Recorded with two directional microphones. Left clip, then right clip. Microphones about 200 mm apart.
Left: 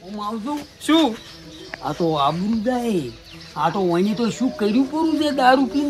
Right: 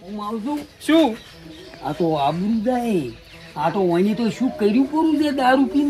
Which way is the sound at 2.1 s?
5° left (ahead or behind).